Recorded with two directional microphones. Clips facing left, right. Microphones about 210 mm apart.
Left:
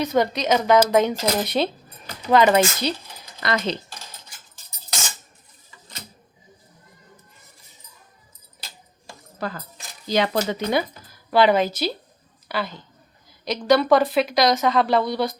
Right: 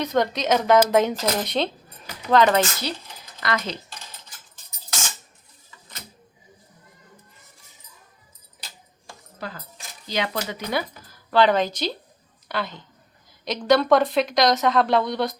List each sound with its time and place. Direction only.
0.0 s a woman's voice: 5° left (ahead or behind)
3.4 s speech: 25° left (ahead or behind)
10.1 s a woman's voice: 35° left (ahead or behind); by 15.4 s centre (ahead or behind)